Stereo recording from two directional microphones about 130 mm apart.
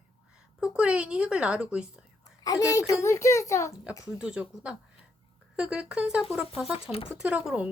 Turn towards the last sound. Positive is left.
turn(degrees=-10)  # may be behind; listen again after turning